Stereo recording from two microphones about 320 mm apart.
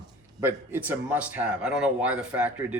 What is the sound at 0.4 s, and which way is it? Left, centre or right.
Speech, centre.